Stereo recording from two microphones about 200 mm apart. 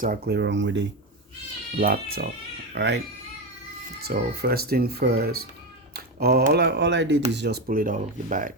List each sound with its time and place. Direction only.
0.0 s speech: 50° right (ahead or behind)
1.8 s speech: 50° right (ahead or behind)
2.7 s speech: 60° right (ahead or behind)
4.0 s speech: 50° right (ahead or behind)